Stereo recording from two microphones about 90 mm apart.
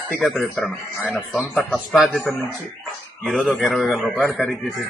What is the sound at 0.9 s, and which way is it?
Speech, centre (ahead or behind).